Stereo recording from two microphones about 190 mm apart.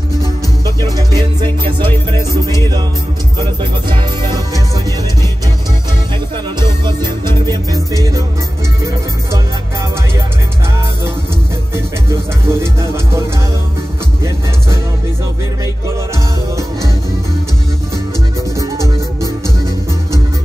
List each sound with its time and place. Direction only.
0.7 s music: 20° right (ahead or behind)
6.6 s music: 25° right (ahead or behind)
11.7 s music: 15° right (ahead or behind)
18.6 s music: 15° right (ahead or behind)